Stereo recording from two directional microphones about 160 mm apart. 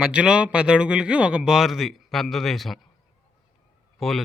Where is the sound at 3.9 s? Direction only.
Centre (ahead or behind).